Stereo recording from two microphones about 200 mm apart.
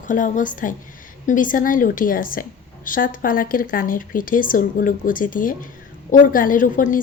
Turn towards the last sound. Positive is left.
turn(degrees=40)  # may be behind; listen again after turning